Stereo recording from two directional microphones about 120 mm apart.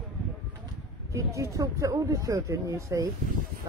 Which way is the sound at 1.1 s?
25° right (ahead or behind).